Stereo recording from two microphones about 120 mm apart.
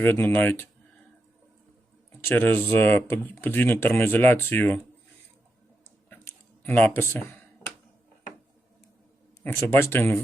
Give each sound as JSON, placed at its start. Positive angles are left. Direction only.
{"t": 0.0, "sound": "speech", "side_deg": 20}
{"t": 2.2, "sound": "speech", "side_deg": 15}
{"t": 6.1, "sound": "a sound", "side_deg": 15}
{"t": 9.4, "sound": "speech", "side_deg": 15}